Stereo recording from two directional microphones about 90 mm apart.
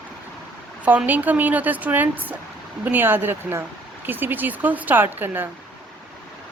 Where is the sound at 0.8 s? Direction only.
20° right (ahead or behind).